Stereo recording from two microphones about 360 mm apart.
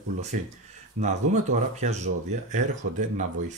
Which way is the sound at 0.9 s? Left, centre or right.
Centre.